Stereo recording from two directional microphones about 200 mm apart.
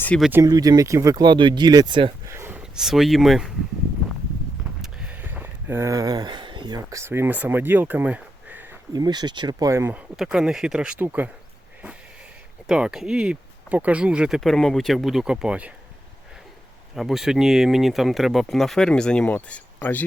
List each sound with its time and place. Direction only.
0.0 s speech: 5° left (ahead or behind)
0.3 s speech: 15° right (ahead or behind)
2.2 s speech: 10° right (ahead or behind)
4.8 s speech: 5° right (ahead or behind)
12.6 s speech: 5° right (ahead or behind)
16.9 s speech: centre (ahead or behind)